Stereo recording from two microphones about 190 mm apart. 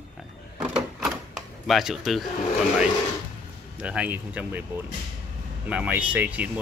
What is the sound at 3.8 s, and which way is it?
Speech, 5° right (ahead or behind).